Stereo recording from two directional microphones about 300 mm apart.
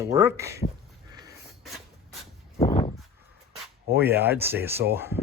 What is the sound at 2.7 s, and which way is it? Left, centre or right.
Dog, left.